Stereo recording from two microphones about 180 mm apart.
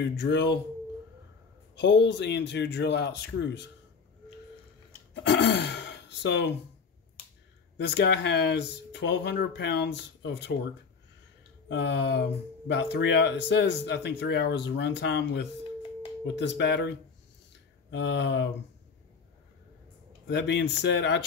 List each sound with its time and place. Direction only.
0.0 s speech: 70° left (ahead or behind)
1.8 s speech: 75° left (ahead or behind)
5.1 s speech: 75° left (ahead or behind)
7.7 s speech: 70° left (ahead or behind)
11.7 s speech: 75° left (ahead or behind)
17.9 s speech: 75° left (ahead or behind)
20.2 s speech: 75° left (ahead or behind)